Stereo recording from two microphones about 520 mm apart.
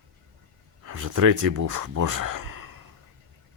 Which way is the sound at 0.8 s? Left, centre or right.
Right.